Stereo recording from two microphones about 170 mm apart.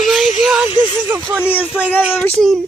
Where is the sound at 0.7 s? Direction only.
30° left (ahead or behind).